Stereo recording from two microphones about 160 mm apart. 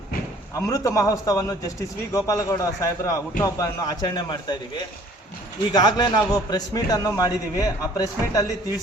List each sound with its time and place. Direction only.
0.5 s a man's voice: 20° left (ahead or behind)
5.7 s a man's voice: 25° left (ahead or behind)